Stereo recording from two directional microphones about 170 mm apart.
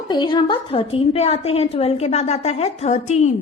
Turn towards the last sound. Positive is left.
turn(degrees=40)  # may be behind; listen again after turning